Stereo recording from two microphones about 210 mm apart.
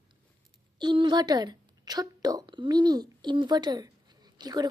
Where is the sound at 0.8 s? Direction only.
20° right (ahead or behind).